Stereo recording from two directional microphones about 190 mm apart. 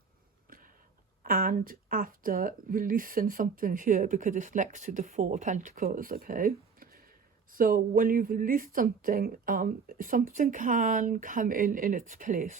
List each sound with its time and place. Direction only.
1.2 s speech: 50° right (ahead or behind)